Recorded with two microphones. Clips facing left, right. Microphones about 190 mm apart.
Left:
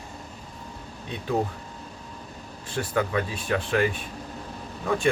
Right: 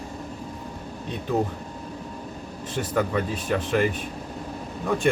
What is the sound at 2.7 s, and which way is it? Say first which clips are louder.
Speech: right 1 dB; centre (ahead or behind).